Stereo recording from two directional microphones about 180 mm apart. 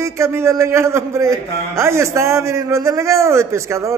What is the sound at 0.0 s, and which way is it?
A man's voice, 15° right (ahead or behind).